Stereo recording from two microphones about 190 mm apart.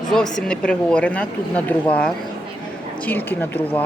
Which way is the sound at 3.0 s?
10° left (ahead or behind).